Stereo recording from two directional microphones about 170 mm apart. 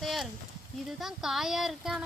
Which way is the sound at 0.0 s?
Centre (ahead or behind).